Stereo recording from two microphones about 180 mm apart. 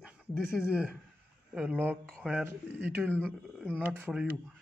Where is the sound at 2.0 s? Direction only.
5° left (ahead or behind).